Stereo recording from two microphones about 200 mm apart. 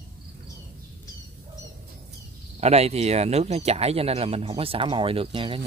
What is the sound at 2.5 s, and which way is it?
Speech, 30° right (ahead or behind).